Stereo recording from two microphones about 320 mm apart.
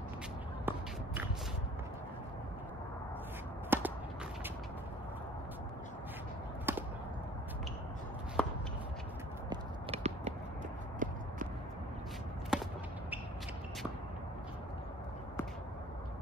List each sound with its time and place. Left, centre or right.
0.7 s walk: centre
3.7 s whip: centre
6.7 s chop: centre
8.4 s shuffle: centre
9.5 s a sound: centre
11.0 s walk: right
12.5 s a sound: centre